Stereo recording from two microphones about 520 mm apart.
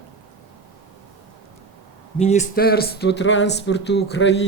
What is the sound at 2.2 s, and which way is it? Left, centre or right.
A man's voice, centre.